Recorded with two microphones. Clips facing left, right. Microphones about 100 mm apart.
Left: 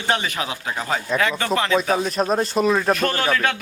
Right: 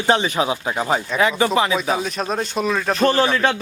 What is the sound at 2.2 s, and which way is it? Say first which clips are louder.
Speech: left 3 dB; centre (ahead or behind).